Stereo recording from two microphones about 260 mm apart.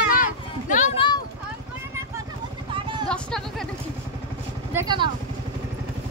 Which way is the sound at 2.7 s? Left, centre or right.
Centre.